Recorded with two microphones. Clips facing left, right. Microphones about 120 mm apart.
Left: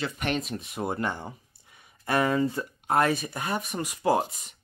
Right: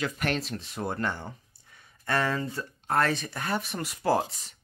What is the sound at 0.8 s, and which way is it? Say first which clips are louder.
Speech: left 1 dB; 15° left (ahead or behind).